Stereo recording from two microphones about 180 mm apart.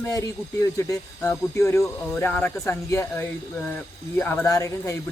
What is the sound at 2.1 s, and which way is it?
Speech, 5° left (ahead or behind).